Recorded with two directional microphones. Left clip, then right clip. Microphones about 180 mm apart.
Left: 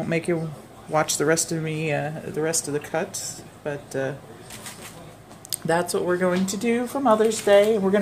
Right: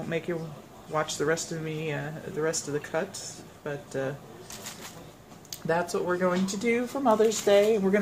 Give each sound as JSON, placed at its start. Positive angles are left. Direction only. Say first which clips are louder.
{"t": 0.3, "sound": "a man's voice", "louder": "left 7 dB", "side_deg": 45}
{"t": 2.3, "sound": "speech", "louder": "left 3 dB", "side_deg": 30}
{"t": 5.5, "sound": "speech", "louder": "left 5 dB", "side_deg": 30}
{"t": 6.6, "sound": "speech", "louder": "left 3 dB", "side_deg": 15}